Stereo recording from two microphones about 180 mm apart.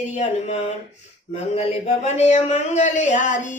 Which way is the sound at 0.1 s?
40° left (ahead or behind).